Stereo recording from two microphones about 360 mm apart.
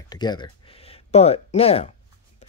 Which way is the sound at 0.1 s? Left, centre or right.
Centre.